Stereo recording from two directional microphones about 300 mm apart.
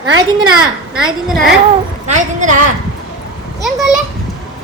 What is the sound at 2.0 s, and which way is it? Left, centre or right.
Speech, right.